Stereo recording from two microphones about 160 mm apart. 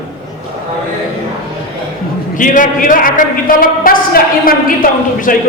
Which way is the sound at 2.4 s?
55° left (ahead or behind).